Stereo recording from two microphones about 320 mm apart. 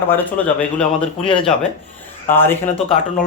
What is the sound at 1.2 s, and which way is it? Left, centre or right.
Speech, centre.